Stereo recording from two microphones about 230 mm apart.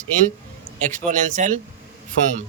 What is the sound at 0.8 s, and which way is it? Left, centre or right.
Speech, right.